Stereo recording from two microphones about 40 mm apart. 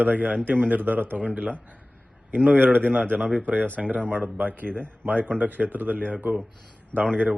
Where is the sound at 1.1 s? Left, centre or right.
Right.